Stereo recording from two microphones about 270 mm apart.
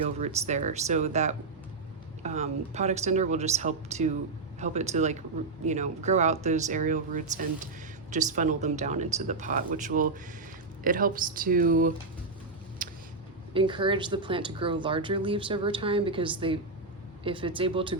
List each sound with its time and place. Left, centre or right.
0.2 s speech: right
12.8 s vehicle: right
13.5 s speech: centre